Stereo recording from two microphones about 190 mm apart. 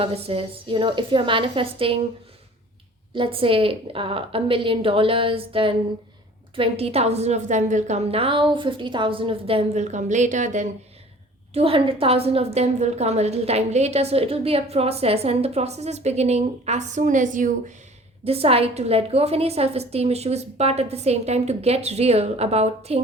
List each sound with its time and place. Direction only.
0.0 s a woman's voice: 30° right (ahead or behind)
3.2 s a woman's voice: 30° right (ahead or behind)
11.5 s a woman's voice: 30° right (ahead or behind)
18.3 s a woman's voice: 30° right (ahead or behind)